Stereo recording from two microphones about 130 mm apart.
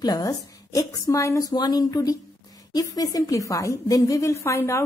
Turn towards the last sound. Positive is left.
turn(degrees=20)  # may be behind; listen again after turning